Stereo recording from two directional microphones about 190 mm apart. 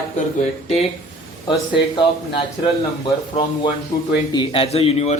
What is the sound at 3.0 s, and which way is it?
Speech, 25° left (ahead or behind).